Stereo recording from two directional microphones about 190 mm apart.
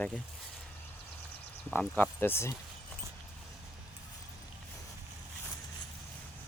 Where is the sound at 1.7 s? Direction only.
10° left (ahead or behind).